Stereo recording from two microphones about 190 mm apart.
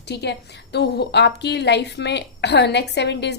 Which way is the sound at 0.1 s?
60° left (ahead or behind).